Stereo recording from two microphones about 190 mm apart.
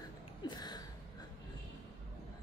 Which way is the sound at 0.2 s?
20° left (ahead or behind).